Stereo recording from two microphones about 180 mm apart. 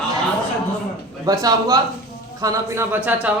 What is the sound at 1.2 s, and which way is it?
A man's voice, 20° right (ahead or behind).